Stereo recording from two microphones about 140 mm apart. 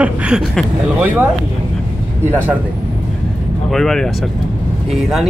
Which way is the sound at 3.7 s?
5° left (ahead or behind).